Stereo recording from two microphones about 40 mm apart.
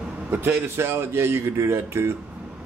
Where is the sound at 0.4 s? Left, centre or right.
Right.